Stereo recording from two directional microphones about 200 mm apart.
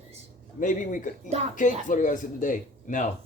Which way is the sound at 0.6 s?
40° left (ahead or behind).